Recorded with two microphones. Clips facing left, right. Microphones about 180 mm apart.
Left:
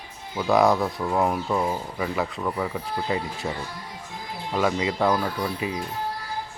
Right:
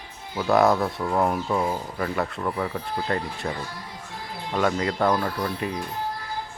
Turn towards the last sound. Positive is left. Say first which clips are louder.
# even
turn(degrees=5)  # may be behind; listen again after turning